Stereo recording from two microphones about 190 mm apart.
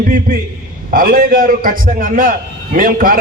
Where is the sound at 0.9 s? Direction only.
45° right (ahead or behind).